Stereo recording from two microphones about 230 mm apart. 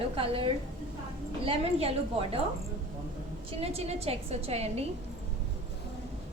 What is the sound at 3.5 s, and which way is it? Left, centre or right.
A woman's voice, right.